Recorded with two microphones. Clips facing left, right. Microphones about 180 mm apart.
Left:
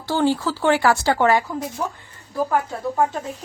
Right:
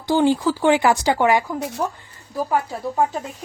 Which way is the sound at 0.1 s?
15° right (ahead or behind).